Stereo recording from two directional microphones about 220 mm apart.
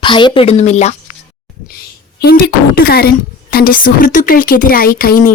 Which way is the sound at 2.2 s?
40° left (ahead or behind).